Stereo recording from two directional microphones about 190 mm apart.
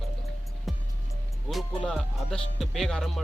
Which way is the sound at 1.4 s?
Centre (ahead or behind).